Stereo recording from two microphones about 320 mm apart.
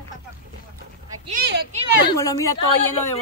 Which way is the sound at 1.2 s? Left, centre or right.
Right.